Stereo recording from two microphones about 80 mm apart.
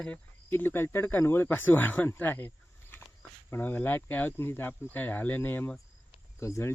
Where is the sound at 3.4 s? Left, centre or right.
Left.